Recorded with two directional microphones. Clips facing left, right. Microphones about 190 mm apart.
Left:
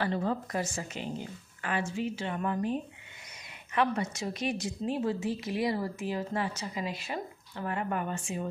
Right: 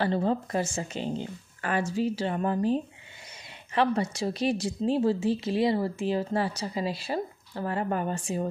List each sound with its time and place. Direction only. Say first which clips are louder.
0.0 s a woman's voice: right 4 dB; 30° right (ahead or behind)